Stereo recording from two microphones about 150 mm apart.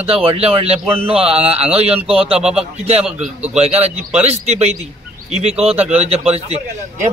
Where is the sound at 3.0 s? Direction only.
5° right (ahead or behind).